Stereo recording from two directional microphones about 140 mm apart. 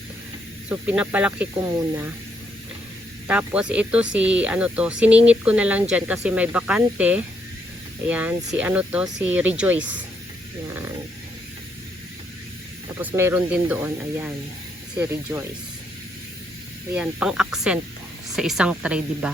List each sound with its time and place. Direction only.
0.7 s speech: 10° right (ahead or behind)
1.6 s speech: 20° right (ahead or behind)
3.2 s speech: 5° right (ahead or behind)
13.0 s speech: 15° right (ahead or behind)
16.9 s speech: 10° right (ahead or behind)